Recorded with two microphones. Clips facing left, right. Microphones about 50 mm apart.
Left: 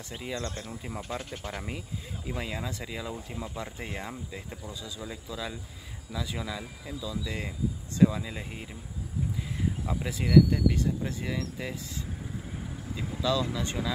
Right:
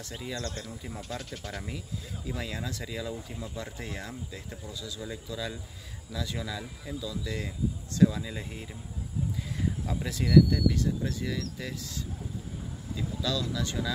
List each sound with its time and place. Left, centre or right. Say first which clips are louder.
0.2 s speech: left 1 dB; left
2.3 s speech: left 2 dB; centre
13.2 s speech: left 4 dB; left